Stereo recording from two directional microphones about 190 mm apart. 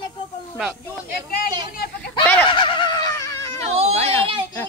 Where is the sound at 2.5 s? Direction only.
25° left (ahead or behind).